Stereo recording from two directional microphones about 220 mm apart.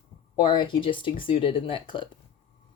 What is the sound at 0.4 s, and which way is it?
Speech, 20° left (ahead or behind).